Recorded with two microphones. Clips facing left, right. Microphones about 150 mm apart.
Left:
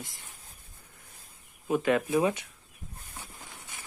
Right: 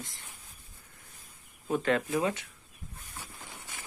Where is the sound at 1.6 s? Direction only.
10° left (ahead or behind).